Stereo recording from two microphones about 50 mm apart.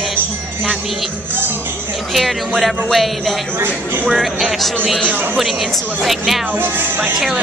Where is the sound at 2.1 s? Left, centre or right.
Centre.